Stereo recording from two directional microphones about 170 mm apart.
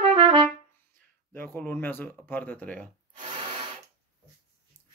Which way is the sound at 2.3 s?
10° left (ahead or behind).